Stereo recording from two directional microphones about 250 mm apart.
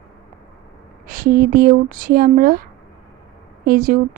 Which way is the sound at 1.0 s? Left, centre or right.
Right.